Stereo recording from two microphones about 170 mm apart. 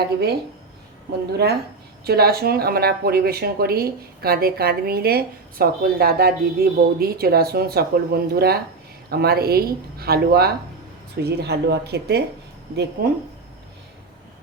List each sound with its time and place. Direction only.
0.0 s speech: 70° right (ahead or behind)